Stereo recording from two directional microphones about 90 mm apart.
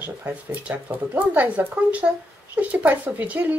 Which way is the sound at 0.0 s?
15° right (ahead or behind).